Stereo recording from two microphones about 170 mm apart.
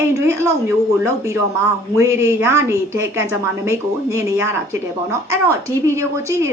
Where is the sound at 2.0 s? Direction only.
15° right (ahead or behind).